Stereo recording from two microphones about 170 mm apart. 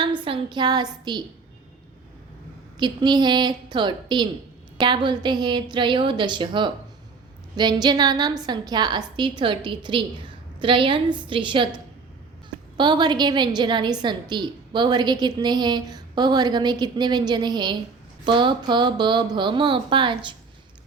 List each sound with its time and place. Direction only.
0.0 s a woman's voice: 25° right (ahead or behind)
2.7 s a woman's voice: 25° right (ahead or behind)